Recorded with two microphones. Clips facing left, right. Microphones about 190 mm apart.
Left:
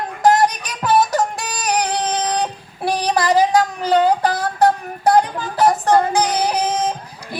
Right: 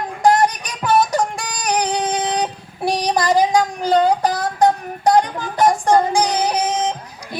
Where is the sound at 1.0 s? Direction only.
10° left (ahead or behind).